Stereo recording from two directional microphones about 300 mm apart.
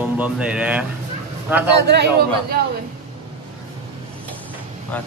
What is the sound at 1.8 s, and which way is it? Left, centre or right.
Speech, right.